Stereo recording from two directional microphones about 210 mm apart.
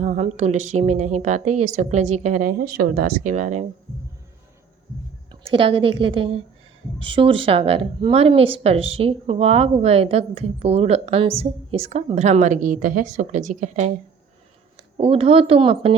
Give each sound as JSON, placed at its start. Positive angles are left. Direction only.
{"t": 0.0, "sound": "a woman's voice", "side_deg": -35}
{"t": 5.3, "sound": "a woman's voice", "side_deg": -25}
{"t": 14.9, "sound": "speech", "side_deg": -25}